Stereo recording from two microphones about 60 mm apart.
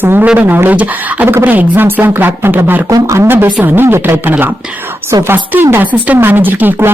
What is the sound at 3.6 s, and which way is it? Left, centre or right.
Speech, right.